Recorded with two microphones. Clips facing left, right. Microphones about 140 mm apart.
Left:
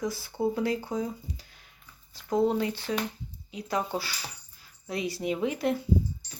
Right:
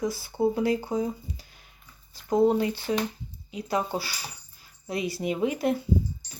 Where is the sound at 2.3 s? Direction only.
10° right (ahead or behind).